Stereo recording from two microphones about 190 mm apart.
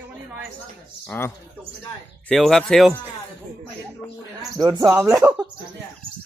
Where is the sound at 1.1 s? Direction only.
10° left (ahead or behind).